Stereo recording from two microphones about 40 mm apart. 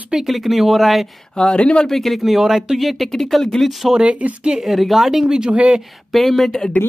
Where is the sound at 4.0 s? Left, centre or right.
Right.